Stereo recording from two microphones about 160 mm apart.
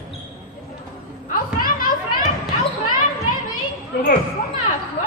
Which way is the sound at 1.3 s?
60° left (ahead or behind).